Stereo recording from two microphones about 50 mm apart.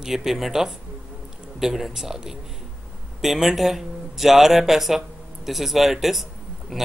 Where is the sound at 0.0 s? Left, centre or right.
Centre.